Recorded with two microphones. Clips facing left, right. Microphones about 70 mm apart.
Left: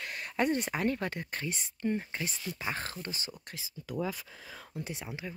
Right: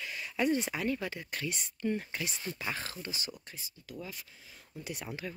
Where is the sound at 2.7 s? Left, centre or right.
Left.